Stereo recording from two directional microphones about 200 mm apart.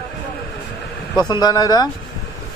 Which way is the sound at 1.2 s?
20° left (ahead or behind).